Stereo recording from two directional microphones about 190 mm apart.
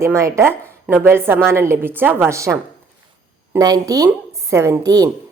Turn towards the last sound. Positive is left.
turn(degrees=-20)  # may be behind; listen again after turning